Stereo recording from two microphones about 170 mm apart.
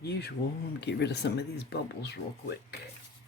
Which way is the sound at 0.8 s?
80° left.